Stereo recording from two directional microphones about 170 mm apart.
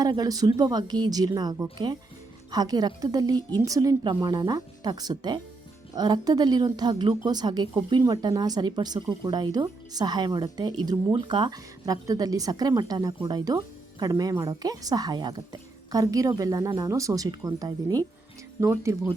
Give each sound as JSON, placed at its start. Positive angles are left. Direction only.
{"t": 0.0, "sound": "speech", "side_deg": -20}